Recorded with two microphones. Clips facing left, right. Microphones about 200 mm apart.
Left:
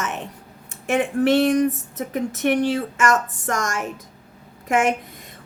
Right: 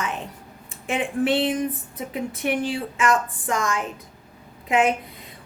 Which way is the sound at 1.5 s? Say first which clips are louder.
Left 6 dB; 80° left.